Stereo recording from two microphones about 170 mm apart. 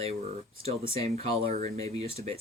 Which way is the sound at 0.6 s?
35° right (ahead or behind).